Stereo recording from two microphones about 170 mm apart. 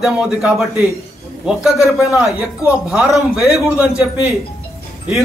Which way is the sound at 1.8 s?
20° left (ahead or behind).